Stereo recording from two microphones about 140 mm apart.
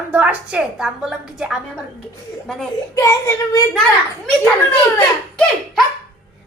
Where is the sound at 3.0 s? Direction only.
20° left (ahead or behind).